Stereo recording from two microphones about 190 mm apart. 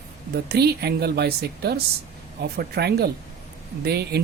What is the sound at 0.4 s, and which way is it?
Speech, 55° right (ahead or behind).